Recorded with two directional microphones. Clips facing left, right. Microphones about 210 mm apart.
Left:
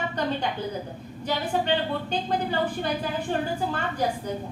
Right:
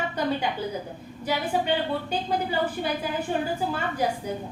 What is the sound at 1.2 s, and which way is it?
A woman's voice, 10° right (ahead or behind).